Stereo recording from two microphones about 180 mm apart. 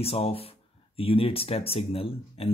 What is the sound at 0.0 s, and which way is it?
Speech, 35° left (ahead or behind).